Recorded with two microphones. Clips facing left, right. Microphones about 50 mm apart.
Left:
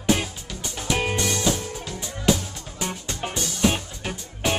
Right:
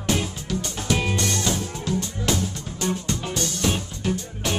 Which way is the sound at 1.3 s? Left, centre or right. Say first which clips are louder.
Left 1 dB; centre.